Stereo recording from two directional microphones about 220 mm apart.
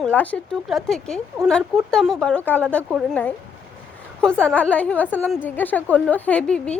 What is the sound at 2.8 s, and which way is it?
Speech, 5° right (ahead or behind).